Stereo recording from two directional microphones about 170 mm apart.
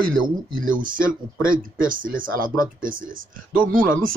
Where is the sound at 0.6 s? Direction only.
55° right (ahead or behind).